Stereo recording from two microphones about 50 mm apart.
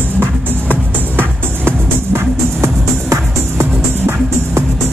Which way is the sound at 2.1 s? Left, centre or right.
Right.